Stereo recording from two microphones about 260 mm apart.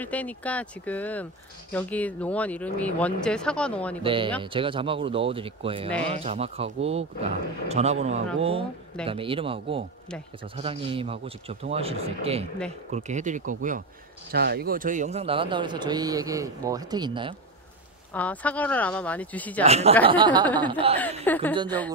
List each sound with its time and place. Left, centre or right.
0.0 s speech: centre
4.0 s speech: centre
18.1 s speech: centre
19.6 s speech: right
21.3 s a woman's voice: centre